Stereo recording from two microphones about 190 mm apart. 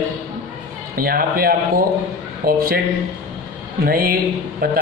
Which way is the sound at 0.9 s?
50° right (ahead or behind).